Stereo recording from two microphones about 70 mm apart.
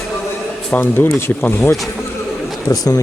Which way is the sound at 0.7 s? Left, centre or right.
Left.